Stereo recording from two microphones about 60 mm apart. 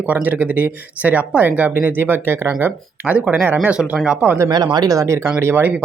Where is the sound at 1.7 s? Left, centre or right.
Right; by 4.4 s centre.